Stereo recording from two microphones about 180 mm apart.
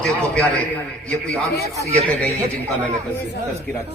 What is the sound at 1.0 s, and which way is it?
Speech, 5° left (ahead or behind).